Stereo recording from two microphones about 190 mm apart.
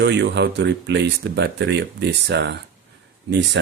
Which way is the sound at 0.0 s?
65° right (ahead or behind).